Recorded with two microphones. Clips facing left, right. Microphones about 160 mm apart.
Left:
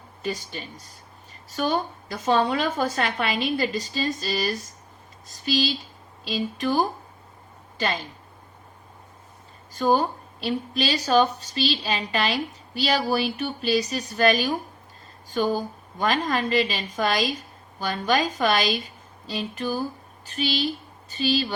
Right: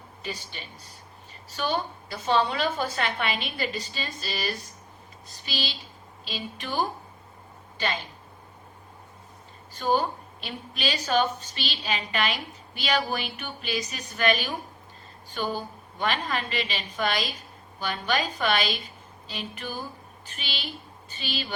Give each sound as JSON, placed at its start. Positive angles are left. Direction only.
{"t": 0.2, "sound": "a woman's voice", "side_deg": 45}
{"t": 9.7, "sound": "a woman's voice", "side_deg": 40}